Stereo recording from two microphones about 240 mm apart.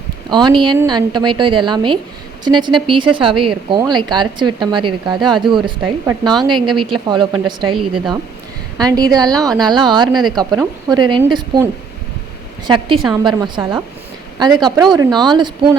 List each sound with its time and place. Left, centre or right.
0.3 s speech: centre
7.8 s speech: centre
8.8 s a woman's voice: centre
14.9 s a woman's voice: centre